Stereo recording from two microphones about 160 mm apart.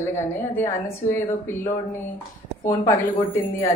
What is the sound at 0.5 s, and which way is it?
A woman's voice, 15° left (ahead or behind).